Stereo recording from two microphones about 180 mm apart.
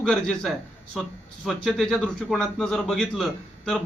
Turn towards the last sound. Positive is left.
turn(degrees=5)  # may be behind; listen again after turning